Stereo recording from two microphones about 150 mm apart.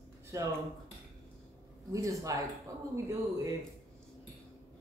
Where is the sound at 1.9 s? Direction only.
20° right (ahead or behind).